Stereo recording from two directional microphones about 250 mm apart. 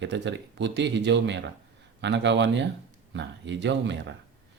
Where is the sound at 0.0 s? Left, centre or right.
Right.